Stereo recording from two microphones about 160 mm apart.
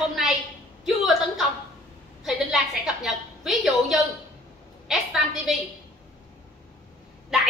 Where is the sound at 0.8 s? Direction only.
Centre (ahead or behind).